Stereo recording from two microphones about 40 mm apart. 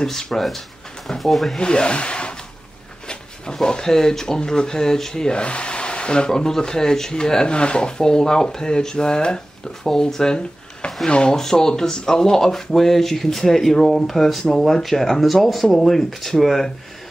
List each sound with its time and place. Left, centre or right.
0.0 s speech: centre
1.6 s a sound: left
3.6 s speech: centre